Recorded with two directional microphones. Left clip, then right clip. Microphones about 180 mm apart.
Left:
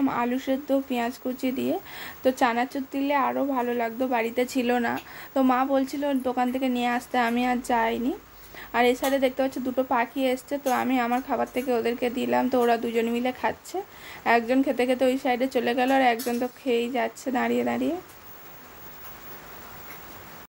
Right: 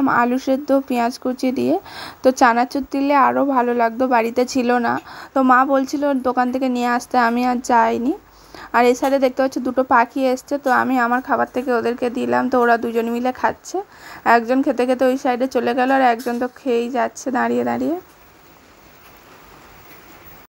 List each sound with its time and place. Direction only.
0.0 s a woman's voice: 35° right (ahead or behind)
8.5 s a sound: 35° right (ahead or behind)
9.0 s speech: 30° right (ahead or behind)